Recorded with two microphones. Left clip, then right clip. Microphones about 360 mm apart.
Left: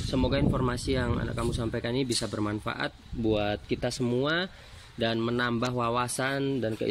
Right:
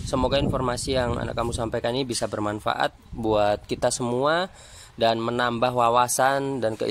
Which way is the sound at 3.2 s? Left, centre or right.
Right.